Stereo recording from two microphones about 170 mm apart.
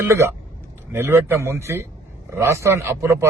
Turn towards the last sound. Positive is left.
turn(degrees=-15)  # may be behind; listen again after turning